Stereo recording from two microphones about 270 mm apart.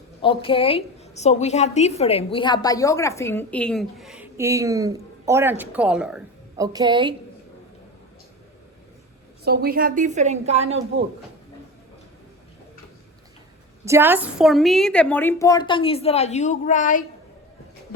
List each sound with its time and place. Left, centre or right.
0.2 s a woman's voice: centre
6.7 s a woman's voice: centre
9.4 s a woman's voice: right
13.8 s a woman's voice: centre; by 17.0 s left